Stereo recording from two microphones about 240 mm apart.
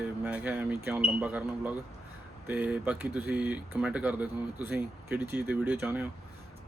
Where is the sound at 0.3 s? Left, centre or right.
Centre.